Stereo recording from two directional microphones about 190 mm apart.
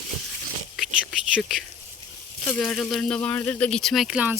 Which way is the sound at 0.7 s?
Centre (ahead or behind).